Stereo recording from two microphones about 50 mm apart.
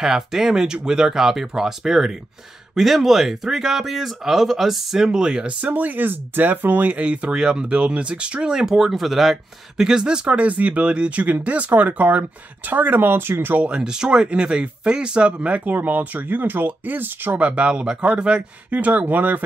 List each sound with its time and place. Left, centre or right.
0.0 s speech: centre
5.7 s speech: right
8.5 s speech: centre
10.2 s speech: right
13.7 s speech: centre
15.7 s speech: right
17.4 s speech: right